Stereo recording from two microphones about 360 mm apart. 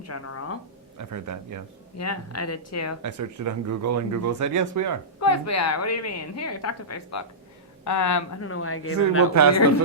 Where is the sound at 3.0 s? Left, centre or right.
Right.